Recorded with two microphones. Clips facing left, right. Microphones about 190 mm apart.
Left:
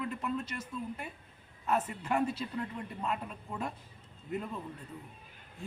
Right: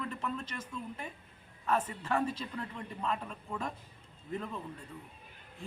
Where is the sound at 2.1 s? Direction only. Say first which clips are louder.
Left 1 dB; 10° left (ahead or behind).